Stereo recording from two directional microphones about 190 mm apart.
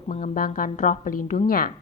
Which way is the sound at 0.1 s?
45° left (ahead or behind).